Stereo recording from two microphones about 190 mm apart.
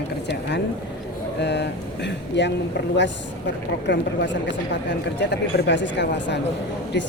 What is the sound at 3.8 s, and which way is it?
Speech, 65° left (ahead or behind).